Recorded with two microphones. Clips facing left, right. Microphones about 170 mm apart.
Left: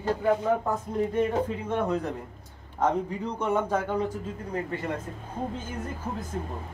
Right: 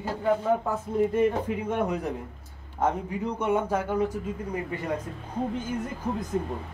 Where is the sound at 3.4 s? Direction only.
5° right (ahead or behind).